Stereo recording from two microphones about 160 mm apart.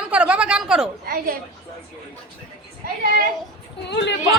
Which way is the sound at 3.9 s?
90° left.